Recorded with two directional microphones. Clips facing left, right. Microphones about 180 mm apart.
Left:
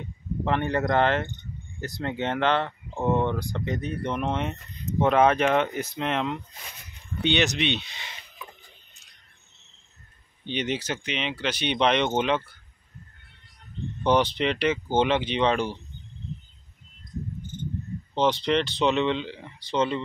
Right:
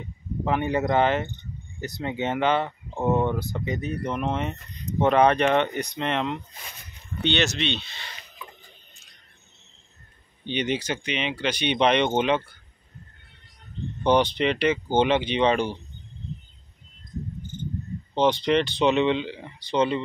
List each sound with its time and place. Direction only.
0.0 s speech: 5° right (ahead or behind)
7.2 s speech: 15° left (ahead or behind)
10.4 s speech: centre (ahead or behind)
14.0 s speech: 5° left (ahead or behind)
18.1 s speech: centre (ahead or behind)